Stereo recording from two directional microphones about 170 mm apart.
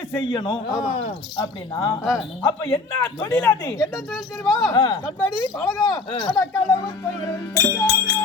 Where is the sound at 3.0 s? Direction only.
15° left (ahead or behind).